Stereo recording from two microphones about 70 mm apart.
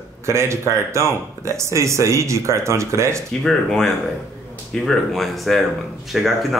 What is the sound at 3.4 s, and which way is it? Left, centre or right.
Speech, centre.